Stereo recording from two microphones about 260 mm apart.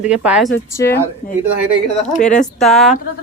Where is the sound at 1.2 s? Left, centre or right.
Left.